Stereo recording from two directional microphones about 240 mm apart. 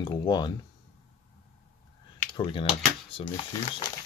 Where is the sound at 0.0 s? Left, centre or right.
Centre.